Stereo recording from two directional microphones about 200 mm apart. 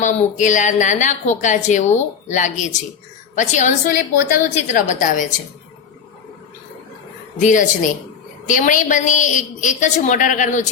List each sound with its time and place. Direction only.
0.0 s a woman's voice: 35° left (ahead or behind)
7.3 s a woman's voice: 40° left (ahead or behind)